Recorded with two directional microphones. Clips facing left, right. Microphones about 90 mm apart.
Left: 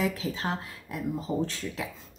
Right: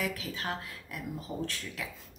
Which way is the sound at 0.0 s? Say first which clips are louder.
Left 5 dB; 25° left (ahead or behind).